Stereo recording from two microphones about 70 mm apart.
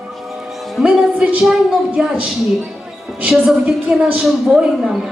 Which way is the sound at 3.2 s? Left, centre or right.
Centre.